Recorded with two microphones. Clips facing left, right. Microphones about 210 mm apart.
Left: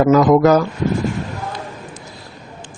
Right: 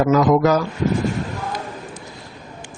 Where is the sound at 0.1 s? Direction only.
50° left (ahead or behind).